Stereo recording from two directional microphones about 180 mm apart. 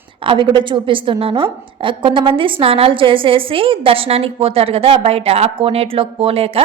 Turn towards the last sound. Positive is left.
turn(degrees=-30)  # may be behind; listen again after turning